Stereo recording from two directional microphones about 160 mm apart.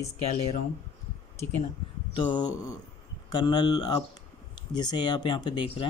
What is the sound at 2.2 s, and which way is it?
Speech, 25° left (ahead or behind).